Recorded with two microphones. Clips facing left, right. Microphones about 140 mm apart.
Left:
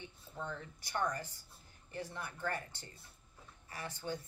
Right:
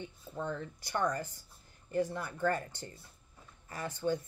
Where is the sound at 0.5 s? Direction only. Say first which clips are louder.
Right 6 dB; 40° right (ahead or behind).